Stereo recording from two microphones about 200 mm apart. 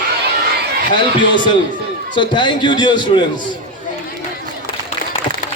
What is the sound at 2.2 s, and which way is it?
A man's voice, 25° left (ahead or behind).